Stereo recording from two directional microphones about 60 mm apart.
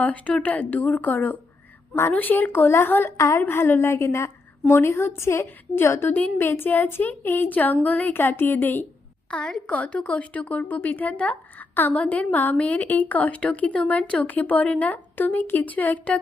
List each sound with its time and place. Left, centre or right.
0.0 s a woman's voice: left
2.1 s speech: left
3.2 s a woman's voice: left
3.4 s a woman's voice: left
6.1 s speech: left
6.4 s speech: left
9.3 s a woman's voice: centre